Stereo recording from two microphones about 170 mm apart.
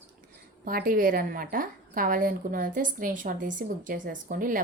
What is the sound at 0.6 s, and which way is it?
A woman's voice, 60° right (ahead or behind).